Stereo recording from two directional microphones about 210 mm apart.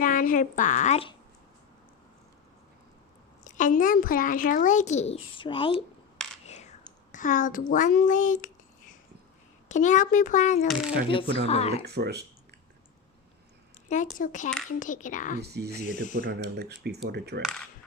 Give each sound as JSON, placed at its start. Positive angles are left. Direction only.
{"t": 0.0, "sound": "a woman's voice", "side_deg": 40}
{"t": 3.4, "sound": "a woman's voice", "side_deg": 35}
{"t": 6.5, "sound": "whispering", "side_deg": 35}
{"t": 7.7, "sound": "a woman's voice", "side_deg": 40}
{"t": 9.6, "sound": "a woman's voice", "side_deg": 35}
{"t": 11.7, "sound": "speech", "side_deg": -50}
{"t": 13.9, "sound": "a woman's voice", "side_deg": 35}
{"t": 15.4, "sound": "speech", "side_deg": -50}
{"t": 15.9, "sound": "a woman's voice", "side_deg": 35}
{"t": 16.2, "sound": "speech", "side_deg": -50}
{"t": 17.4, "sound": "speech", "side_deg": 5}